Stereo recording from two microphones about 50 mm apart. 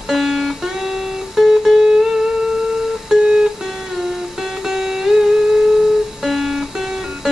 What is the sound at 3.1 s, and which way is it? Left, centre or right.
Music, centre.